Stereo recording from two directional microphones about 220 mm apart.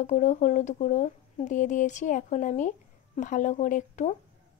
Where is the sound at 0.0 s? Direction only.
35° left (ahead or behind).